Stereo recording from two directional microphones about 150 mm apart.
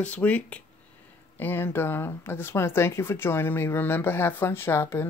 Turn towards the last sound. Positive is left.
turn(degrees=15)  # may be behind; listen again after turning